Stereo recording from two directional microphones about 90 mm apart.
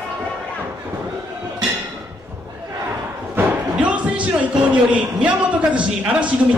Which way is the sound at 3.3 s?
15° right (ahead or behind).